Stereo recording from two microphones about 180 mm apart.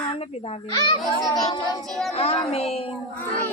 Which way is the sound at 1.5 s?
20° left (ahead or behind).